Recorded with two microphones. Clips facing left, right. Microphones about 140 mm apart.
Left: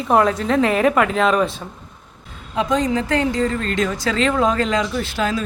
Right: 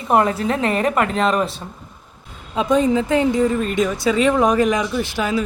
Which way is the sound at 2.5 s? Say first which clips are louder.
Right 3 dB; 20° right (ahead or behind).